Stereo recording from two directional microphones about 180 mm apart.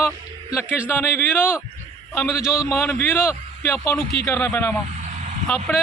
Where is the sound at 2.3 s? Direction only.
5° right (ahead or behind).